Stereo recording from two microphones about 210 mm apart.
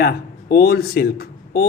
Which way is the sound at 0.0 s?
50° left (ahead or behind).